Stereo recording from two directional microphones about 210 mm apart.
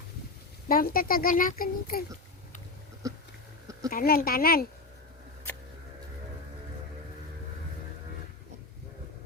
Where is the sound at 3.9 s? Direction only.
45° left (ahead or behind).